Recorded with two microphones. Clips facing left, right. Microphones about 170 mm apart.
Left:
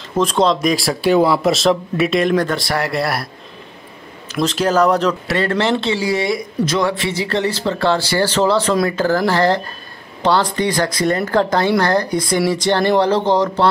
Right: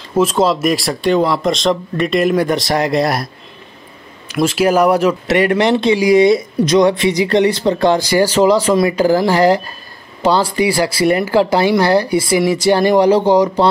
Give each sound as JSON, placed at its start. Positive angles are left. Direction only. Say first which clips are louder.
{"t": 0.1, "sound": "speech", "louder": "right 2 dB", "side_deg": -5}
{"t": 2.5, "sound": "speech", "louder": "right 5 dB", "side_deg": -20}
{"t": 4.3, "sound": "speech", "louder": "right 4 dB", "side_deg": -10}